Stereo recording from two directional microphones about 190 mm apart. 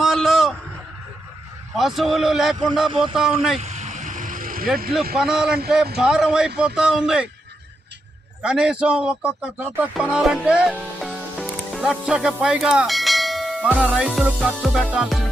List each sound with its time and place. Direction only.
0.0 s a sound: centre (ahead or behind)
1.7 s speech: centre (ahead or behind)
3.6 s a sound: 35° right (ahead or behind)
5.1 s speech: 5° right (ahead or behind)
8.4 s speech: 5° right (ahead or behind)
11.3 s music: centre (ahead or behind)
13.9 s speech: centre (ahead or behind)